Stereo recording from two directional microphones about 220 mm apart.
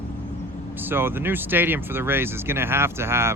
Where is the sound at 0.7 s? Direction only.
10° right (ahead or behind).